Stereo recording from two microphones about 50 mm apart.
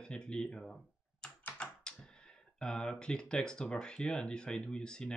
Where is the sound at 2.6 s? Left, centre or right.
Centre.